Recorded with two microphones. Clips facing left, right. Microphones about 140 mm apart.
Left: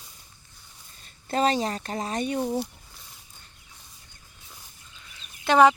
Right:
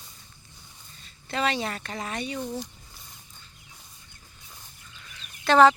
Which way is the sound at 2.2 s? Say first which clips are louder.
Left 6 dB; 55° left (ahead or behind).